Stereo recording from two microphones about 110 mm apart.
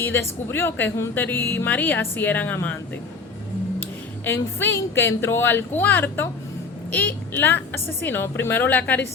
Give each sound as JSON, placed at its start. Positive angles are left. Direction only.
{"t": 0.0, "sound": "speech", "side_deg": 25}
{"t": 4.3, "sound": "a woman's voice", "side_deg": 20}